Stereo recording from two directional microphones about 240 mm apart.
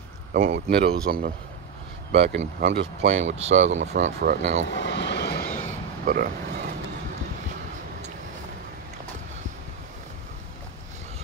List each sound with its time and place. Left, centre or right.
0.3 s speech: right
3.1 s speech: right
4.0 s speech: right
4.6 s vehicle: left
5.7 s burping: right